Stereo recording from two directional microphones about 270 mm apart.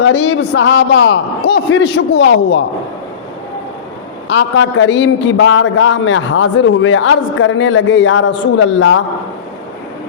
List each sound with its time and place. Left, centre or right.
0.0 s a man's voice: left
4.3 s a man's voice: left